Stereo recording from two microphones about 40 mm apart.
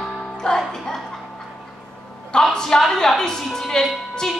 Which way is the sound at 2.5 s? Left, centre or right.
Centre.